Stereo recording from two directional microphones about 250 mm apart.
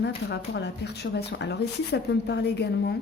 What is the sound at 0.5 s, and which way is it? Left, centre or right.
A woman's voice, left.